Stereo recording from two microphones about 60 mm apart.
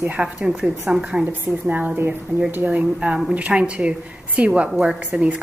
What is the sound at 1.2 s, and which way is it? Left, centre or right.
A woman's voice, right.